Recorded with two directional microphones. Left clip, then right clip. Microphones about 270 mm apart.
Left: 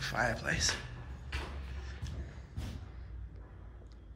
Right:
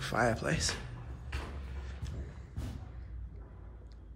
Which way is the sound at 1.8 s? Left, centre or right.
Centre.